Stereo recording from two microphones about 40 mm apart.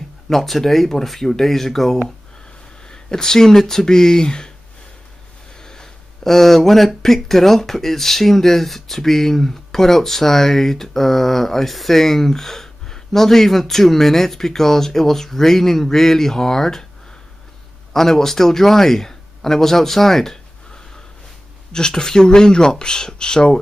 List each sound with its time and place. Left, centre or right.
0.3 s speech: centre
5.6 s speech: centre
17.9 s speech: centre